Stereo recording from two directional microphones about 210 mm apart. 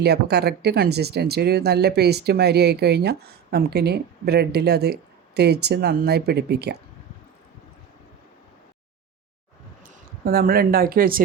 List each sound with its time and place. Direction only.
0.0 s speech: 50° right (ahead or behind)
10.2 s speech: 45° right (ahead or behind)